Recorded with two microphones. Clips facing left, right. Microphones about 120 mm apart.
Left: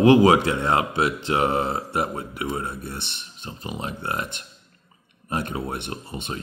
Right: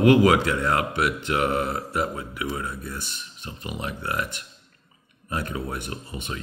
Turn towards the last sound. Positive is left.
turn(degrees=30)  # may be behind; listen again after turning